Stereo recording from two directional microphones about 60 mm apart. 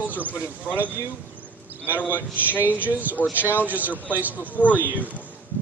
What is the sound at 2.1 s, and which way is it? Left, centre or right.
Speech, right.